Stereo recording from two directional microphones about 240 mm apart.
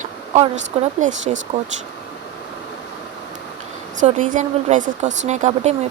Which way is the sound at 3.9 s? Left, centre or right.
Right.